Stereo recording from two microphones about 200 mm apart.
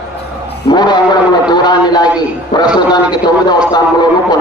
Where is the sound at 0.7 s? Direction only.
20° left (ahead or behind).